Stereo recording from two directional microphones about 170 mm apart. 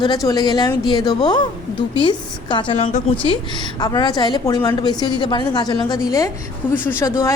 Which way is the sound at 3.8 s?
25° left (ahead or behind).